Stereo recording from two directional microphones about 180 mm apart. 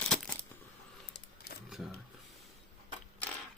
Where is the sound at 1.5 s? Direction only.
60° left (ahead or behind).